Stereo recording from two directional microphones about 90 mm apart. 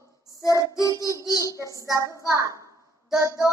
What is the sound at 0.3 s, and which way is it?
Child singing, 40° left (ahead or behind).